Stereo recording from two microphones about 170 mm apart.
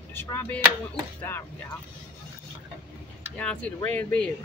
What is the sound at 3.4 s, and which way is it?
Speech, 5° left (ahead or behind).